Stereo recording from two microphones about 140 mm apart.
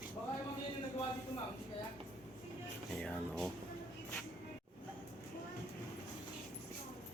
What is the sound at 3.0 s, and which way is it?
Speech, 5° left (ahead or behind).